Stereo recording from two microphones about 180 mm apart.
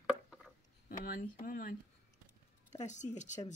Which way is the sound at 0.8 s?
50° left (ahead or behind).